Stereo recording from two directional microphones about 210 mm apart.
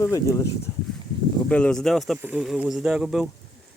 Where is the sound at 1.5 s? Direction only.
5° left (ahead or behind).